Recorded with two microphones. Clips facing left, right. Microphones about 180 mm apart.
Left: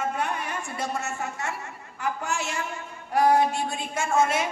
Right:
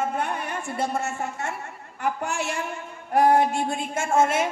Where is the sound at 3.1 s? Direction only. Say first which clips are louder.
Right 2 dB; 55° right (ahead or behind).